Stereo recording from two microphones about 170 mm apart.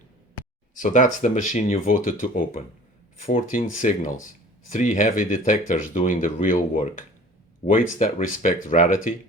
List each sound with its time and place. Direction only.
0.7 s speech: 50° left (ahead or behind)